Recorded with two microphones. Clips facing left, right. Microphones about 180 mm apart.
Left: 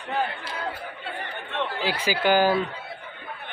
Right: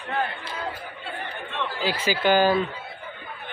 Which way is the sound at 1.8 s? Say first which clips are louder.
Right 1 dB; 10° left (ahead or behind).